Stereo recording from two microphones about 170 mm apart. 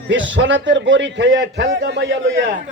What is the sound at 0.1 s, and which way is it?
A man's voice, 90° right.